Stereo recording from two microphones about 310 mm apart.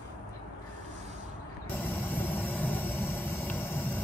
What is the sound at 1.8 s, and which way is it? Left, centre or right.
Vehicle, centre.